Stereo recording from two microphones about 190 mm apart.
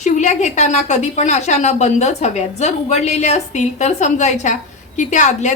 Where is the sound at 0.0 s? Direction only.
40° left (ahead or behind).